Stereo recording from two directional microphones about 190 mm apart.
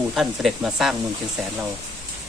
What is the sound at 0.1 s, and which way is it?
Speech, centre (ahead or behind).